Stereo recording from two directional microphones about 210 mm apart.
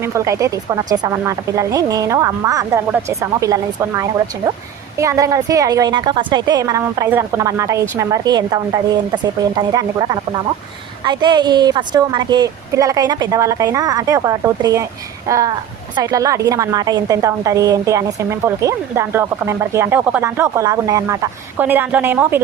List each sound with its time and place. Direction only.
0.0 s a woman's voice: 15° right (ahead or behind)